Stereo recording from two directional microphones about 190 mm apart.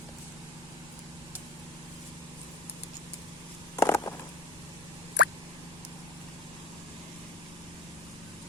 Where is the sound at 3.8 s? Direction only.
15° left (ahead or behind).